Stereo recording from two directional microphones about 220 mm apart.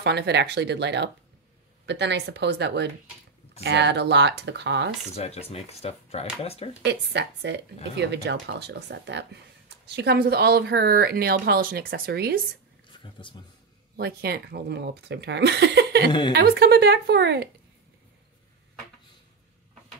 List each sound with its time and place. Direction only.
0.0 s speech: 50° right (ahead or behind)
5.1 s speech: 30° left (ahead or behind)
6.8 s speech: 50° right (ahead or behind)
13.0 s speech: 20° left (ahead or behind)
13.9 s speech: 45° right (ahead or behind)
16.1 s speech: 20° left (ahead or behind)
16.3 s speech: 45° right (ahead or behind)